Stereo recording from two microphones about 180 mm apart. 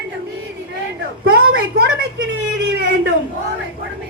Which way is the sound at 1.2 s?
65° right (ahead or behind).